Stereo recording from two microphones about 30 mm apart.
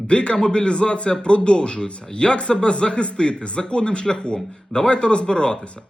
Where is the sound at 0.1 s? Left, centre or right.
Left.